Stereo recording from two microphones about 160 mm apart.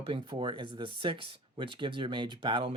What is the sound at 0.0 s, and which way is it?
Speech, 30° right (ahead or behind).